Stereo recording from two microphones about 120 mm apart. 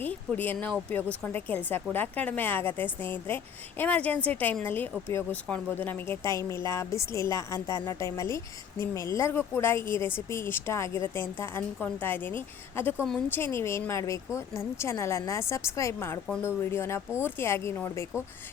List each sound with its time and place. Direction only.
0.0 s a woman's voice: 15° left (ahead or behind)